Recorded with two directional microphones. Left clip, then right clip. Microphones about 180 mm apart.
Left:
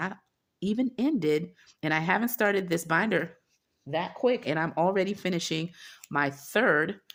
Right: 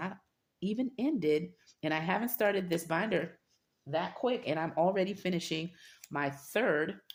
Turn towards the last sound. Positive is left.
turn(degrees=50)  # may be behind; listen again after turning